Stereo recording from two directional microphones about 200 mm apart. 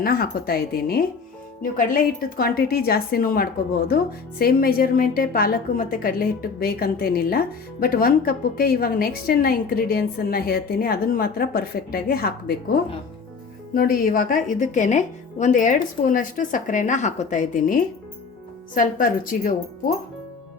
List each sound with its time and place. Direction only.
0.0 s speech: 50° left (ahead or behind)